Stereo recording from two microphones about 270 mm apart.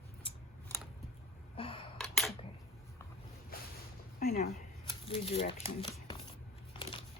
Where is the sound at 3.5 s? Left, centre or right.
Left.